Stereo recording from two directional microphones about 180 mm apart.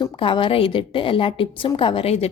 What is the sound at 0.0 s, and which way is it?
A woman's voice, 30° left (ahead or behind).